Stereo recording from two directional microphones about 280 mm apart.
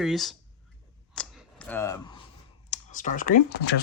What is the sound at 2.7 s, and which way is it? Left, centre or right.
Speech, left.